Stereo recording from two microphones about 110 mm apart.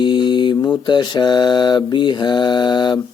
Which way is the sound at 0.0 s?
45° left (ahead or behind).